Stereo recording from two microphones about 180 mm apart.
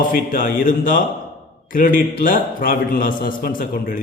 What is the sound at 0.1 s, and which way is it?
Mantra, 50° left (ahead or behind).